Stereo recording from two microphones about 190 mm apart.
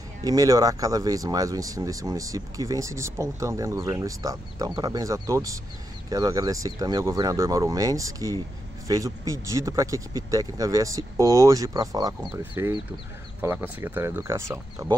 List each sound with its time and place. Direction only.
0.2 s speech: 20° right (ahead or behind)